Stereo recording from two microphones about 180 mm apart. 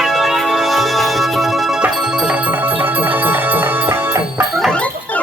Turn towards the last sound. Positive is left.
turn(degrees=5)  # may be behind; listen again after turning